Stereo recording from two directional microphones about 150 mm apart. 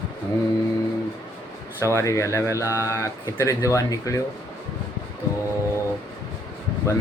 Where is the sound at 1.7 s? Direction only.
20° left (ahead or behind).